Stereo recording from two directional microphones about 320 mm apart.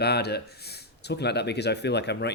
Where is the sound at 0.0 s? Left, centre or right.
Left.